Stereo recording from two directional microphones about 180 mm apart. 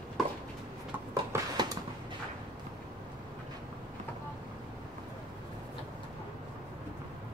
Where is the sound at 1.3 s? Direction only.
20° right (ahead or behind).